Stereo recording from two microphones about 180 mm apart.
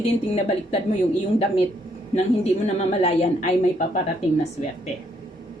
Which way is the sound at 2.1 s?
40° left (ahead or behind).